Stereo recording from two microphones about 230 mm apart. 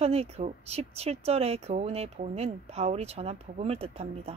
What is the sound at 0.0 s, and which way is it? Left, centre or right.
Speech, right.